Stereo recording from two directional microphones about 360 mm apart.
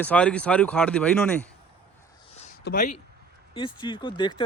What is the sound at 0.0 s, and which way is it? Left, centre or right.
Speech, centre.